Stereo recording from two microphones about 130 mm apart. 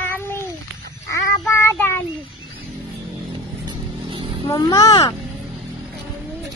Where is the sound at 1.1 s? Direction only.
20° left (ahead or behind).